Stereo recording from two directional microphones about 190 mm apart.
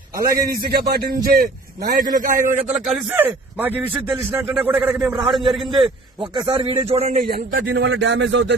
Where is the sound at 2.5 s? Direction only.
35° right (ahead or behind).